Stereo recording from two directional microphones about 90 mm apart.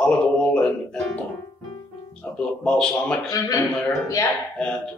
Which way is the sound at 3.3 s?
40° left (ahead or behind).